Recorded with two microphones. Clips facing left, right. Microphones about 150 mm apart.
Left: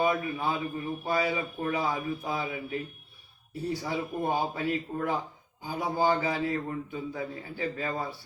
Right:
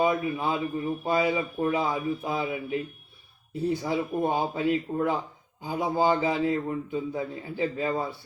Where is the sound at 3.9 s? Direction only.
30° right (ahead or behind).